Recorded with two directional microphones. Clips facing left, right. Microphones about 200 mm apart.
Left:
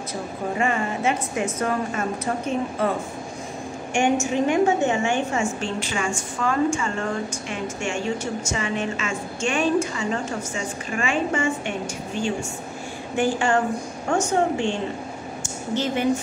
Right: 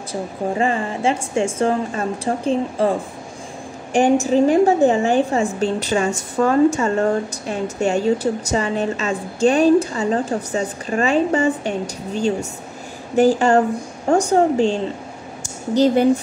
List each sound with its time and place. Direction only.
0.1 s a woman's voice: 30° right (ahead or behind)
3.9 s a woman's voice: 35° right (ahead or behind)